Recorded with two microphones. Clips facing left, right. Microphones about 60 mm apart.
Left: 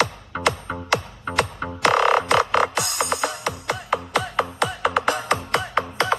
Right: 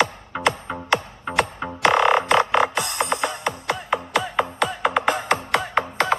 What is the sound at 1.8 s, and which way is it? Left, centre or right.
Music, right.